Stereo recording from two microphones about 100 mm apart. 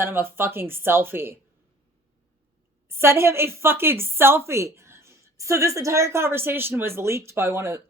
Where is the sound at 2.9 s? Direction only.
25° right (ahead or behind).